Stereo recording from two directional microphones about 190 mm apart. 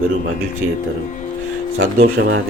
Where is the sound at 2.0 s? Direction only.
55° right (ahead or behind).